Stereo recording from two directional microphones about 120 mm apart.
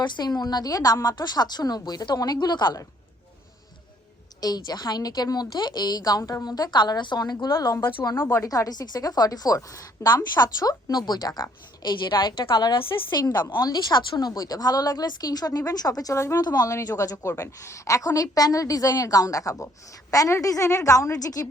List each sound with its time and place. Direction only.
0.0 s speech: 35° left (ahead or behind)
4.4 s a woman's voice: 35° left (ahead or behind)